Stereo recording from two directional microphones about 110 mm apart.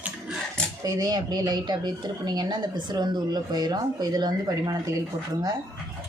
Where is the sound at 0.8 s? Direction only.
35° right (ahead or behind).